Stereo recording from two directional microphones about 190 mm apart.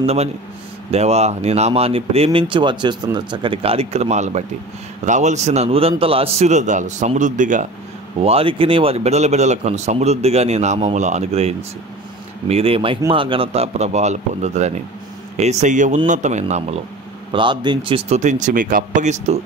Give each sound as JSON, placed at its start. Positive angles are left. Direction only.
{"t": 0.0, "sound": "speech", "side_deg": -35}
{"t": 8.2, "sound": "speech", "side_deg": -30}
{"t": 17.3, "sound": "speech", "side_deg": -25}